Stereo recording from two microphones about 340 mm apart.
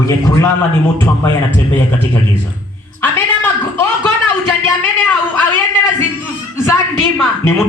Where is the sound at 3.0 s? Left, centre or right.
Centre.